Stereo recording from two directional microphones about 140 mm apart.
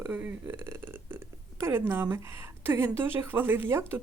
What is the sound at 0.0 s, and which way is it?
Speech, 10° right (ahead or behind).